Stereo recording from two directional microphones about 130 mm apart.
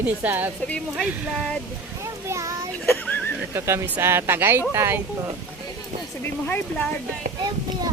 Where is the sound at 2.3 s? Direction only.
25° right (ahead or behind).